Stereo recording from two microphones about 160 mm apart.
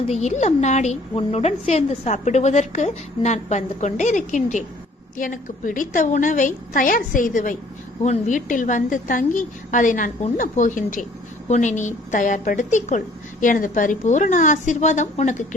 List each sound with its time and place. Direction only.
0.1 s a woman's voice: 45° left (ahead or behind)